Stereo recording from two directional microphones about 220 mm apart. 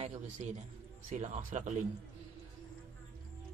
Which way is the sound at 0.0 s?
30° right (ahead or behind).